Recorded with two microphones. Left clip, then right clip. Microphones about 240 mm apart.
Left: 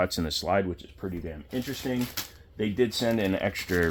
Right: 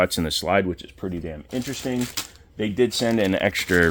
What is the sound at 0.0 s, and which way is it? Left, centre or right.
Speech, right.